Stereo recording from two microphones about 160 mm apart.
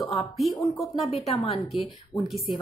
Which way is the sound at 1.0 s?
35° left (ahead or behind).